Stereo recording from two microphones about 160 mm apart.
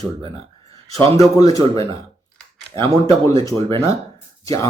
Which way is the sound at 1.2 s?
20° left (ahead or behind).